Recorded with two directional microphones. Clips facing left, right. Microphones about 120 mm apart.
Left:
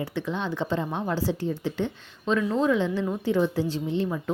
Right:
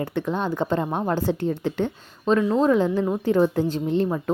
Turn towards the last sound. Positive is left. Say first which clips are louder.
# right 5 dB
turn(degrees=-45)  # may be behind; listen again after turning